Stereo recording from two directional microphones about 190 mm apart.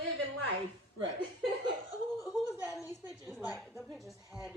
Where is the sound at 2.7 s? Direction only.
15° left (ahead or behind).